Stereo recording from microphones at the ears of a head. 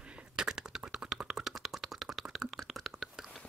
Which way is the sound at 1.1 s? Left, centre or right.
Right.